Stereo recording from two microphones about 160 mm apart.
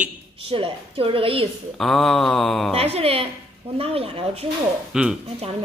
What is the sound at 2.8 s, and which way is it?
A woman's voice, 40° right (ahead or behind).